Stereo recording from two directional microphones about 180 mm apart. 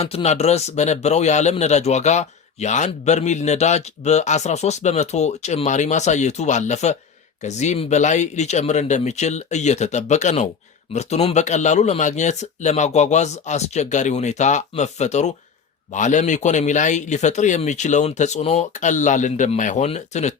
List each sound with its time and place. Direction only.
0.0 s a man's voice: 35° left (ahead or behind)